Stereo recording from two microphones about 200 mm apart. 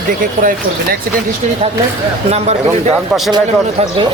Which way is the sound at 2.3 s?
30° right (ahead or behind).